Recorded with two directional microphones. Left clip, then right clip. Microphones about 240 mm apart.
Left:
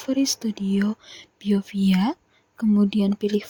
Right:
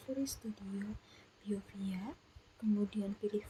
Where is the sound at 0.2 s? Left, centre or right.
Left.